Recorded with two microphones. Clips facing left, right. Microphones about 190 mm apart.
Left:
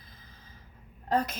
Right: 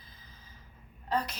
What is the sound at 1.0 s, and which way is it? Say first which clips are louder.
Speech: left 4 dB; 50° left (ahead or behind).